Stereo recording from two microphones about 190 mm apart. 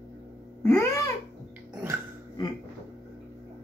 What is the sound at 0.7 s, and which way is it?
Babbling, 15° left (ahead or behind).